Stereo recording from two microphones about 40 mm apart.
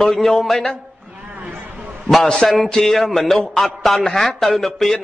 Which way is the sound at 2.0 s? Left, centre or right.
Centre.